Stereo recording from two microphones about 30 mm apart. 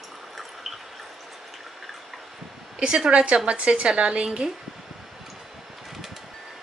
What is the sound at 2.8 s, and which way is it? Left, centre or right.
Speech, right.